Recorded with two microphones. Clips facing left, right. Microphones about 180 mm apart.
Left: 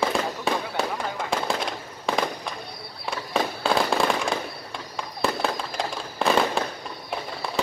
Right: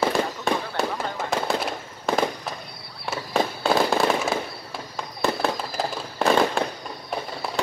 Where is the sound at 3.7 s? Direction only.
5° right (ahead or behind).